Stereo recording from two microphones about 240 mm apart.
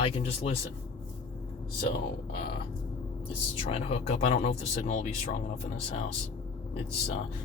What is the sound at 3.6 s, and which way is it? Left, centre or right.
Speech, left.